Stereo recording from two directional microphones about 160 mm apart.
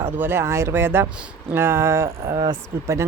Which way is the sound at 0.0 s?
15° right (ahead or behind).